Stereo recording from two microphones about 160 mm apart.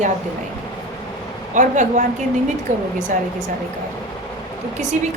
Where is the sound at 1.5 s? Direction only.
50° right (ahead or behind).